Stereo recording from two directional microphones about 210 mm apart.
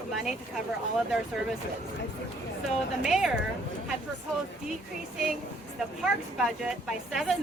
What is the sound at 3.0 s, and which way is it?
Speech, centre (ahead or behind).